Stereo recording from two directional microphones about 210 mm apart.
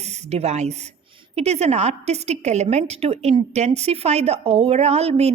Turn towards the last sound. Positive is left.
turn(degrees=-30)  # may be behind; listen again after turning